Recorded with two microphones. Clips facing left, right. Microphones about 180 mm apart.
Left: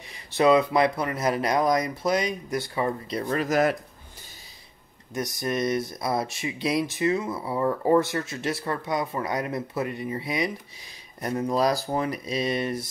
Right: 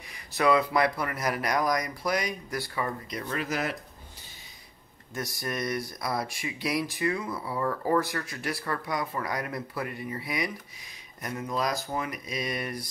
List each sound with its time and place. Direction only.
0.1 s speech: 25° left (ahead or behind); by 3.7 s 45° left (ahead or behind)
5.1 s speech: 20° left (ahead or behind)